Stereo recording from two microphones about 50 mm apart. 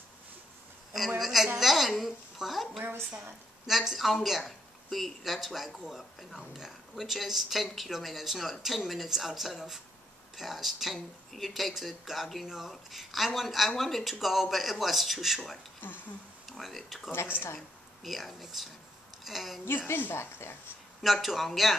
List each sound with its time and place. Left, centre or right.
0.9 s a sound: centre
3.6 s speech: centre
15.8 s speech: left
16.4 s speech: centre
17.1 s speech: left
17.6 s speech: centre
19.9 s speech: left
21.0 s speech: centre